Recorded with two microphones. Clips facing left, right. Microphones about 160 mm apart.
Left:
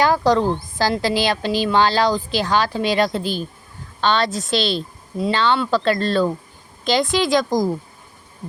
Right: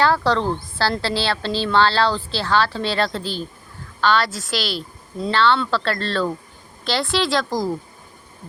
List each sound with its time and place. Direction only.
0.0 s a woman's voice: 15° left (ahead or behind)